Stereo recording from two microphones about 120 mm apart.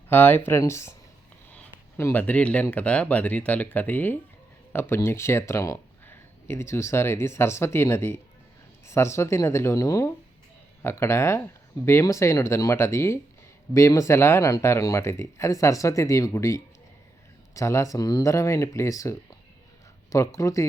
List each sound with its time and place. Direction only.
0.1 s speech: 15° left (ahead or behind)
2.0 s speech: 20° left (ahead or behind)